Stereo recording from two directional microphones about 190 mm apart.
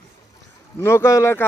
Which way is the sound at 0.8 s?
15° left (ahead or behind).